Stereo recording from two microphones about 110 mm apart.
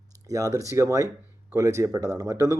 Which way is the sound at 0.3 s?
30° right (ahead or behind).